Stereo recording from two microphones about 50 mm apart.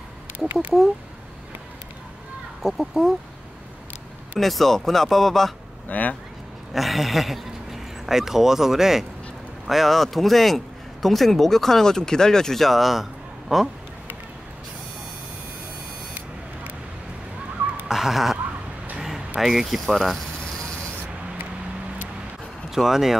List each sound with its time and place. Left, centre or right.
2.6 s speech: centre
4.4 s speech: centre
5.9 s speech: left
6.7 s speech: centre
17.8 s a sound: centre
19.9 s speech: centre
22.7 s speech: centre